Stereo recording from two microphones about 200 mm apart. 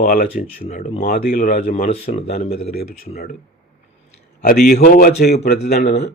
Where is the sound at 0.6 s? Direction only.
30° left (ahead or behind).